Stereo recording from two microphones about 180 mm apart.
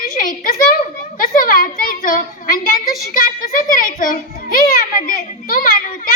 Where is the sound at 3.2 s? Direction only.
50° left (ahead or behind).